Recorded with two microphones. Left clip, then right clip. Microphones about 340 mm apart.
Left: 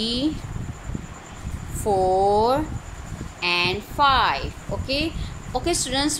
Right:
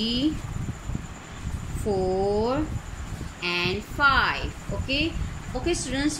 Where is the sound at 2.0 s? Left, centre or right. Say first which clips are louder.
Left 7 dB; left.